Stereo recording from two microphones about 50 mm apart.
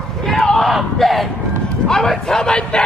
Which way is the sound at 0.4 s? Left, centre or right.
Centre.